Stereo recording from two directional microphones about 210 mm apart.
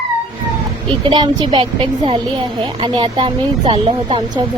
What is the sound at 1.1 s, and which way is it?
A woman's voice, 20° right (ahead or behind).